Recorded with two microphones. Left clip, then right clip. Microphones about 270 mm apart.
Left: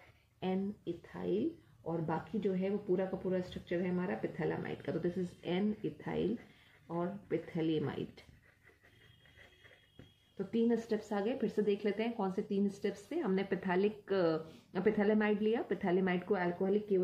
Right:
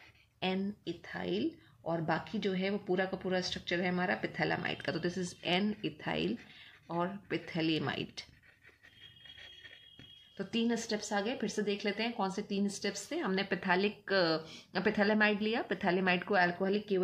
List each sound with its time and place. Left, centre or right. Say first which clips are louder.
1.1 s speech: even; right
10.3 s speech: left 1 dB; right